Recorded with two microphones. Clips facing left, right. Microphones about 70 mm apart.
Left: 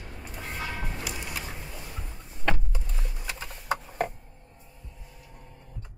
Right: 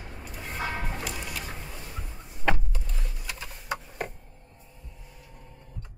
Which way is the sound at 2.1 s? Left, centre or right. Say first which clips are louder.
Right 2 dB; centre.